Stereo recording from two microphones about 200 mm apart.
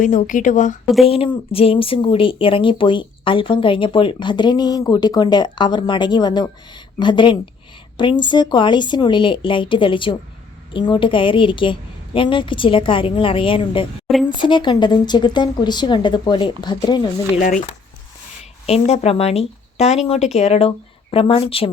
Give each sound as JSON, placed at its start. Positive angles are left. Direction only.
{"t": 0.0, "sound": "a woman's voice", "side_deg": 40}
{"t": 1.0, "sound": "speech", "side_deg": 30}
{"t": 18.6, "sound": "speech", "side_deg": 30}